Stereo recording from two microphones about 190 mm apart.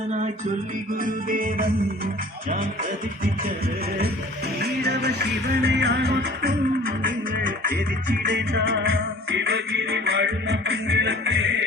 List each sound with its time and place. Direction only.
1.0 s music: 50° right (ahead or behind)
4.6 s music: 65° right (ahead or behind)
8.3 s music: 70° right (ahead or behind)
9.4 s music: 65° right (ahead or behind)